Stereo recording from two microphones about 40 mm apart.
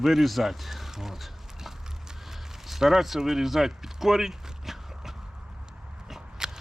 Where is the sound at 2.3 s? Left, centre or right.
Centre.